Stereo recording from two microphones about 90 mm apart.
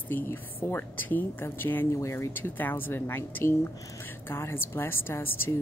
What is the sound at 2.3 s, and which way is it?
A woman's voice, 20° left (ahead or behind).